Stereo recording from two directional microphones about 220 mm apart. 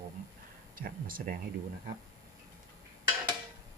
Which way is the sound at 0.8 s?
40° right (ahead or behind).